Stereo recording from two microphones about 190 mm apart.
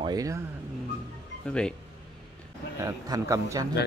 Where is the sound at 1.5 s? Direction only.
5° left (ahead or behind).